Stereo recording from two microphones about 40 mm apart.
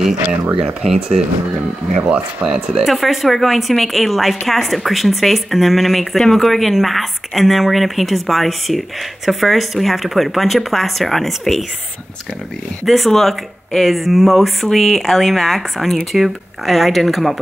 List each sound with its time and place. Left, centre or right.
2.0 s speech: right
2.5 s speech: centre
12.8 s speech: centre